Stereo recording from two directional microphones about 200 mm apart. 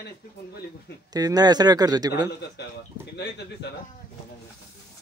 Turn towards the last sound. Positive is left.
turn(degrees=55)  # may be behind; listen again after turning